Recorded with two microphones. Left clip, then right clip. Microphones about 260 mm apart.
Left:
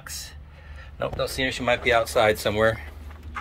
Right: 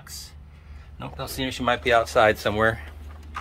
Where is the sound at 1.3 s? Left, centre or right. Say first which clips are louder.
Right 2 dB; centre.